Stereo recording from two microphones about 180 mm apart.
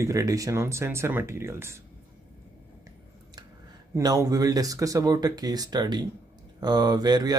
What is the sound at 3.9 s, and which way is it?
Speech, 20° right (ahead or behind).